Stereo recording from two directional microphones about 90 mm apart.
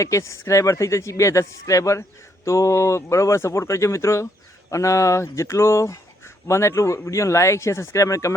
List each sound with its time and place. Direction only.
0.0 s speech: 35° left (ahead or behind)